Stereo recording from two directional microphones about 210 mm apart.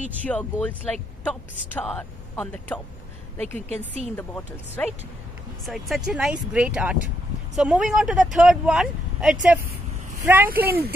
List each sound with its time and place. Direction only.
0.2 s speech: 5° left (ahead or behind)
4.2 s speech: 10° left (ahead or behind); by 10.5 s 10° right (ahead or behind)
10.5 s speech: 45° right (ahead or behind)